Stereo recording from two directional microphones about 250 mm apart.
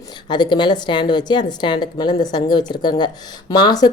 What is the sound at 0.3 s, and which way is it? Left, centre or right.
Speech, centre.